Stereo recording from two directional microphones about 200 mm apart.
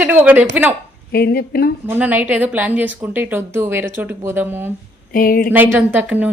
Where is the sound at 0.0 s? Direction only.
10° right (ahead or behind).